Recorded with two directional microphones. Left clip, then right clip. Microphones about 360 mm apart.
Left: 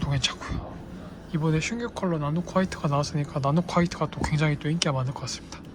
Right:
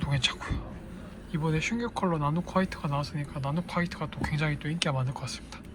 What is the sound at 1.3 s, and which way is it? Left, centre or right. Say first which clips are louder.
Speech: left 3 dB; centre.